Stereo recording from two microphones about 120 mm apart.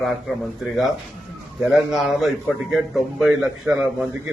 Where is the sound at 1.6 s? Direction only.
Centre (ahead or behind).